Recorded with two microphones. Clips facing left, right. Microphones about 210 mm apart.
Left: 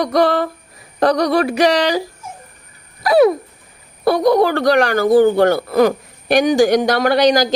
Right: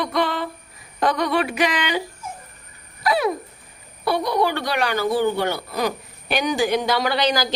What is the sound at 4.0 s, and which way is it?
Speech, 45° left (ahead or behind).